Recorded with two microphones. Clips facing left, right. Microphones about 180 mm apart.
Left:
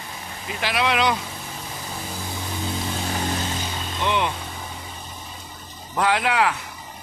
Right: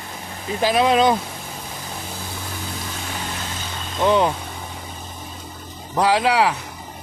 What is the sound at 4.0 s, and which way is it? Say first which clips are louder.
Speech: right 7 dB; 40° right (ahead or behind).